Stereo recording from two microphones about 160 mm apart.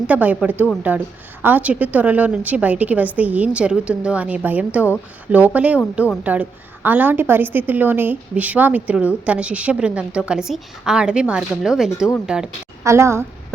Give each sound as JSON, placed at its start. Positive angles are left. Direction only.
{"t": 0.1, "sound": "a woman's voice", "side_deg": -10}
{"t": 12.8, "sound": "a woman's voice", "side_deg": -15}